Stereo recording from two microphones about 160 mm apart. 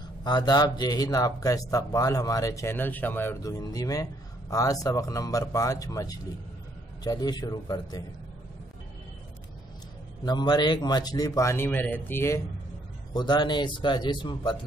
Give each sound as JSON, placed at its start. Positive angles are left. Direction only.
{"t": 0.2, "sound": "speech", "side_deg": 25}
{"t": 10.2, "sound": "speech", "side_deg": 25}
{"t": 13.1, "sound": "speech", "side_deg": 25}